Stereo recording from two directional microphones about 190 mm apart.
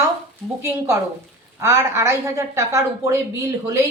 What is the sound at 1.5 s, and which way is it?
Speech, 15° right (ahead or behind).